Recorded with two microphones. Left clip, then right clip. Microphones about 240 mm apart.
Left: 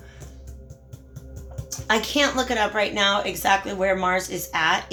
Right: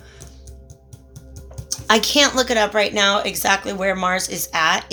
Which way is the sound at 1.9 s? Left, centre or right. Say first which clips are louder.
Right 6 dB; right.